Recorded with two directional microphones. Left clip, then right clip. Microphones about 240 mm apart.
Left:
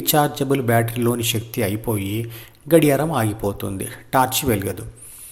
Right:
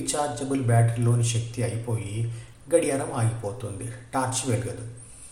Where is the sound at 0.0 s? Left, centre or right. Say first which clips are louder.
Left 9 dB; left.